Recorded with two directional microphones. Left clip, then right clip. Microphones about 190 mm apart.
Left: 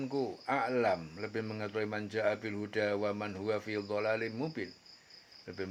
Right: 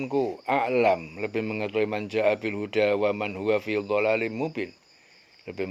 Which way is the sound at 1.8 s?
25° right (ahead or behind).